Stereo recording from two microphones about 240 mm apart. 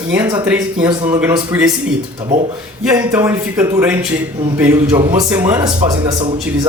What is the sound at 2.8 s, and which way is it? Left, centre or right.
A man's voice, centre.